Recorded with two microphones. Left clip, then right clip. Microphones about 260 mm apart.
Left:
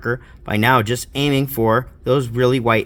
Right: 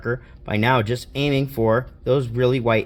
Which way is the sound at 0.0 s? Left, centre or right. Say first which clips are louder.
Left 3 dB; left.